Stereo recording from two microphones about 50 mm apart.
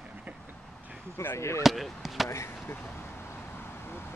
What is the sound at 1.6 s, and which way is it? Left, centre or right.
Speech, centre.